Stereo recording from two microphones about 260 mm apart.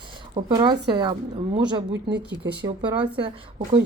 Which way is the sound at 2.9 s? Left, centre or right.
Centre.